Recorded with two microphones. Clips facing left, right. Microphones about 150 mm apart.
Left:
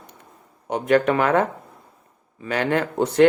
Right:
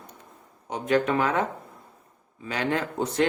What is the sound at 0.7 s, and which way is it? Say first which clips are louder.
Speech: left 5 dB; 65° left (ahead or behind).